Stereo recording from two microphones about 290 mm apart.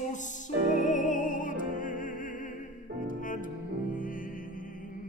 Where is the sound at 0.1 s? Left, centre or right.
Left.